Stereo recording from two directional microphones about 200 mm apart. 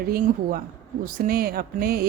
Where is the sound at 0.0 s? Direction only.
50° right (ahead or behind).